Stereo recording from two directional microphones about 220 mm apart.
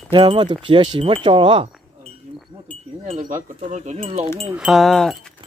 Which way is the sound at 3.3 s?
30° right (ahead or behind).